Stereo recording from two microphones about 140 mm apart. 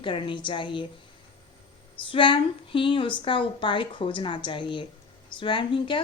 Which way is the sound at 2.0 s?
35° left (ahead or behind).